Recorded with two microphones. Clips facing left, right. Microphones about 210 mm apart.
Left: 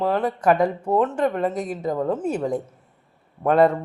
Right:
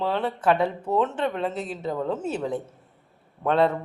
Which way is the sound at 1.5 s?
10° left (ahead or behind).